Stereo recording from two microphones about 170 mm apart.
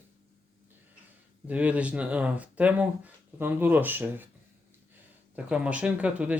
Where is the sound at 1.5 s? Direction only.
10° right (ahead or behind).